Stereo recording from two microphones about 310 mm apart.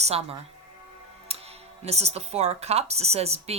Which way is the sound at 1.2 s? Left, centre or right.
Centre.